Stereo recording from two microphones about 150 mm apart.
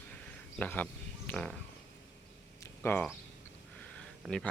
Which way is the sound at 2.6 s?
15° left (ahead or behind).